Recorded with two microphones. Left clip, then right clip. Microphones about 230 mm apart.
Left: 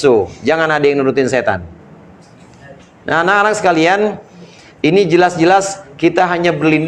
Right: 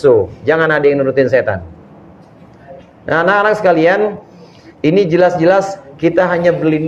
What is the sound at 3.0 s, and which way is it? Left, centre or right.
A man's voice, left.